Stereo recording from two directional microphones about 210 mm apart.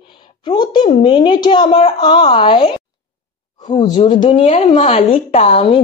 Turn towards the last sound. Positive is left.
turn(degrees=25)  # may be behind; listen again after turning